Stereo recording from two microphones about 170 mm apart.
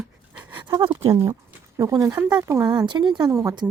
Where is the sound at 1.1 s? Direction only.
15° right (ahead or behind).